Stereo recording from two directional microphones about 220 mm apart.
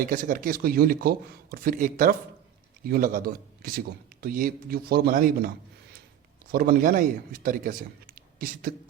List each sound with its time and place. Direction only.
0.0 s a man's voice: 40° right (ahead or behind)
6.5 s a man's voice: 40° right (ahead or behind)